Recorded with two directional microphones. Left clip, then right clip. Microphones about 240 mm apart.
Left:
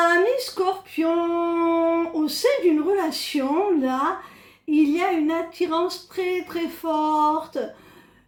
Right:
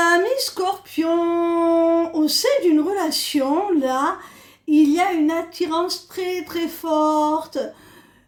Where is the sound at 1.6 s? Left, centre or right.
Right.